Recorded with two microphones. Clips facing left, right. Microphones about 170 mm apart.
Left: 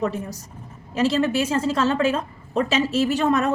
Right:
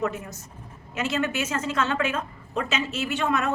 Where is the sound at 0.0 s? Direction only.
30° left (ahead or behind).